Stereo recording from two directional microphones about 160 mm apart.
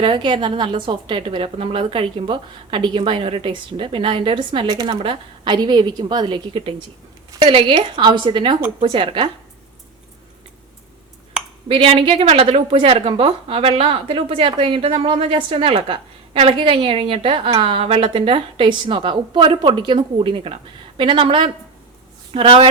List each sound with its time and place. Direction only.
0.0 s a woman's voice: 30° right (ahead or behind)
11.7 s a woman's voice: 35° right (ahead or behind)